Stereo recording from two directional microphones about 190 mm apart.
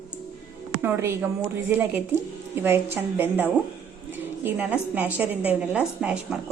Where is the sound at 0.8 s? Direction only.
15° right (ahead or behind).